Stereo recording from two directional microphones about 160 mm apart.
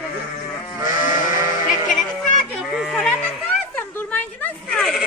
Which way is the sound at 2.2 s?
Centre (ahead or behind).